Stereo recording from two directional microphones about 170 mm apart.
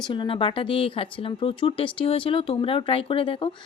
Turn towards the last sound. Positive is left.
turn(degrees=30)  # may be behind; listen again after turning